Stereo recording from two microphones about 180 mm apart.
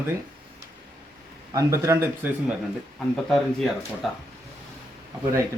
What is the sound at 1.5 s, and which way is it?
Speech, 15° right (ahead or behind).